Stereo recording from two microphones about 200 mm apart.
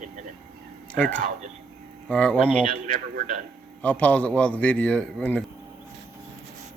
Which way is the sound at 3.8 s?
5° left (ahead or behind).